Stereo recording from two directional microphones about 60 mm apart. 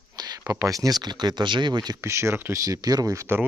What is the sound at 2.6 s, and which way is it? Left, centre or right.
Speech, right.